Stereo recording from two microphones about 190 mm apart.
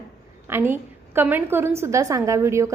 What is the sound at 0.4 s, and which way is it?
A woman's voice, 10° right (ahead or behind).